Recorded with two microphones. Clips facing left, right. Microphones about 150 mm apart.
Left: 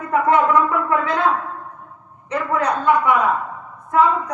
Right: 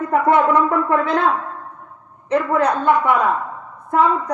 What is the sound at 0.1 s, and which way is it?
A woman's voice, 30° right (ahead or behind).